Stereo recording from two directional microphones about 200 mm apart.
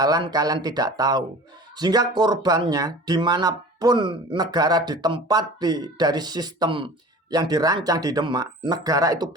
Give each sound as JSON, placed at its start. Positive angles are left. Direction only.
{"t": 0.0, "sound": "speech", "side_deg": -20}